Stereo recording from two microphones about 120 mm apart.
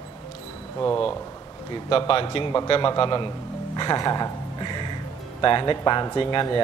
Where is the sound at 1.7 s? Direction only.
45° left (ahead or behind).